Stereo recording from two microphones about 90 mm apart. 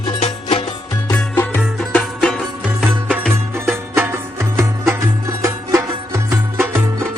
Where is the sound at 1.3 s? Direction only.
20° left (ahead or behind).